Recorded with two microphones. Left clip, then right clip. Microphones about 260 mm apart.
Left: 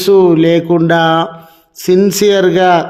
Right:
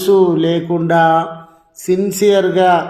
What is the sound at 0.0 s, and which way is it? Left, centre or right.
A man's voice, left.